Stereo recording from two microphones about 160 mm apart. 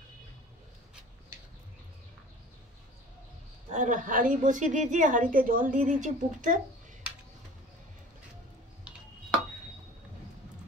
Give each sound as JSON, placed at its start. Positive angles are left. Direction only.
{"t": 3.7, "sound": "a woman's voice", "side_deg": -55}